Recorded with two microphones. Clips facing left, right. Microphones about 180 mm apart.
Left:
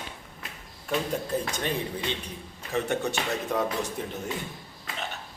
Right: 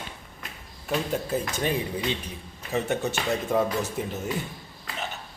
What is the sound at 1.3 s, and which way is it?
A man's voice, 5° right (ahead or behind).